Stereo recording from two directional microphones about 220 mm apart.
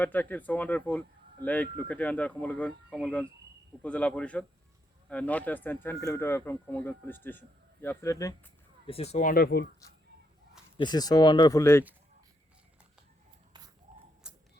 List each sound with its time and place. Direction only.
0.0 s speech: 10° left (ahead or behind)
8.9 s speech: 30° left (ahead or behind); by 9.6 s 45° left (ahead or behind)
10.8 s speech: 20° left (ahead or behind)
14.3 s a sound: 5° right (ahead or behind)